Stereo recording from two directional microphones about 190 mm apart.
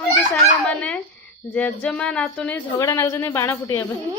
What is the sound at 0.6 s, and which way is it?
A woman's voice, 5° left (ahead or behind).